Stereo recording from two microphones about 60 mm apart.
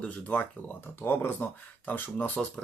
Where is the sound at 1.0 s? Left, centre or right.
Left.